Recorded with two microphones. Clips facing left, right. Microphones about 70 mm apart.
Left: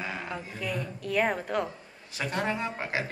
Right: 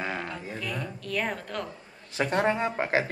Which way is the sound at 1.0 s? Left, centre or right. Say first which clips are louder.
Left 5 dB; centre.